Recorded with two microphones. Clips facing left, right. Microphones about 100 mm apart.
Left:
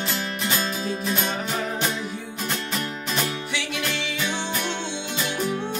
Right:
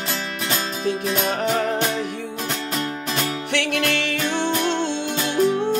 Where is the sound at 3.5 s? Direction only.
60° right (ahead or behind).